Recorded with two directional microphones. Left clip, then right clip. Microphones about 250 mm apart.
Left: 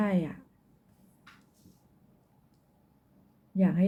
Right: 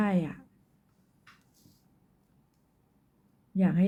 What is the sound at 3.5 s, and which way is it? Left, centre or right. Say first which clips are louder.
Speech: even; centre.